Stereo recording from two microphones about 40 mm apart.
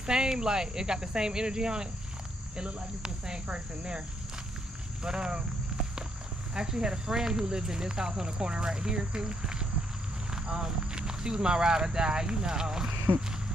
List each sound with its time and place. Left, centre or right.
0.0 s speech: centre
5.0 s speech: centre
6.5 s cricket: centre
10.3 s speech: centre